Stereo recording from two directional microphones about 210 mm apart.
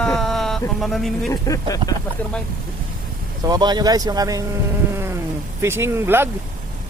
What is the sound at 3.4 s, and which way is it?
Speech, 20° right (ahead or behind).